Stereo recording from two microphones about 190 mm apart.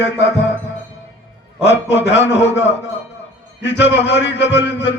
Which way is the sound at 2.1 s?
70° left (ahead or behind).